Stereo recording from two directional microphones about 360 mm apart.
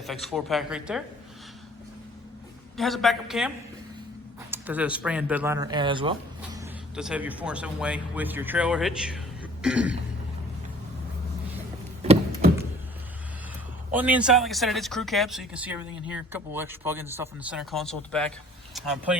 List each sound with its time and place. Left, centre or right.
0.0 s speech: centre
2.7 s speech: centre
4.5 s speech: centre
12.0 s a sound: centre
13.9 s speech: centre